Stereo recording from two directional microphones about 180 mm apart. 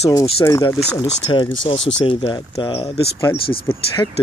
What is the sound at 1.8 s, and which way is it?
Speech, 90° left.